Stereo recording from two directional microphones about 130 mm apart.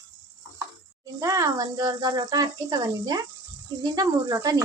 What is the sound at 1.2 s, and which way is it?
Speech, 25° right (ahead or behind).